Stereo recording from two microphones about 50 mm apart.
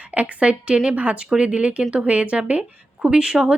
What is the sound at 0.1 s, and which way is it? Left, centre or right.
Speech, right.